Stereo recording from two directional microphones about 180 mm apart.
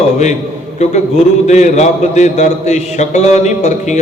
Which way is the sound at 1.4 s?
40° left (ahead or behind).